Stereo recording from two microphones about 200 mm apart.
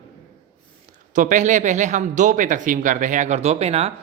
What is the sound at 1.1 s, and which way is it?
Speech, 40° right (ahead or behind).